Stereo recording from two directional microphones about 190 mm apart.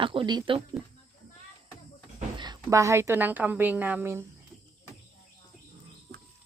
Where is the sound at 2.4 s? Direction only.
20° right (ahead or behind).